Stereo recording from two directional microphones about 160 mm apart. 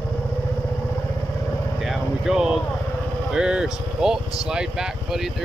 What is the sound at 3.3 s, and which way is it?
Speech, 5° right (ahead or behind).